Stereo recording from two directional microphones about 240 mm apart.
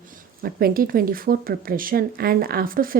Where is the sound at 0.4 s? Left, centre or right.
Right.